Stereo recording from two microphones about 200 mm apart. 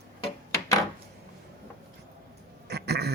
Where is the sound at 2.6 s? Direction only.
55° right (ahead or behind).